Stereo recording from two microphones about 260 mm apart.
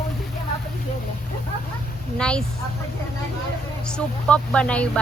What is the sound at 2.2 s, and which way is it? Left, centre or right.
Speech, centre.